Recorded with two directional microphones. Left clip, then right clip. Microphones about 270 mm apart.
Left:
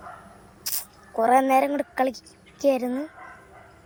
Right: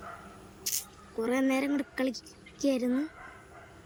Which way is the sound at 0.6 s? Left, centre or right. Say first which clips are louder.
Left 2 dB; centre.